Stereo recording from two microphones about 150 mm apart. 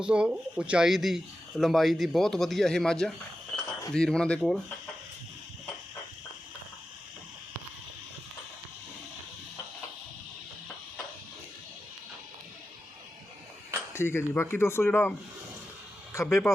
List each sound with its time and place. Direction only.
0.0 s speech: 5° right (ahead or behind)
3.5 s cricket: centre (ahead or behind)
3.9 s speech: 5° left (ahead or behind)
13.9 s speech: 15° left (ahead or behind)
16.1 s speech: 15° left (ahead or behind)